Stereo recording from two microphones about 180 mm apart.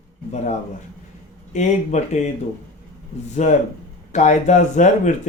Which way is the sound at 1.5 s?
40° left (ahead or behind).